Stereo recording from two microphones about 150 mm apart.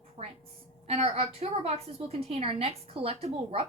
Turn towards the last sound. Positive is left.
turn(degrees=-45)  # may be behind; listen again after turning